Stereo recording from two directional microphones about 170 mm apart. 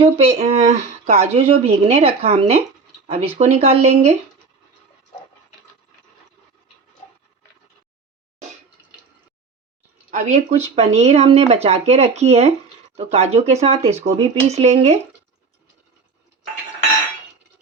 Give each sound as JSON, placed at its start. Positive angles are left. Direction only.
{"t": 0.0, "sound": "speech", "side_deg": -35}
{"t": 10.1, "sound": "speech", "side_deg": -45}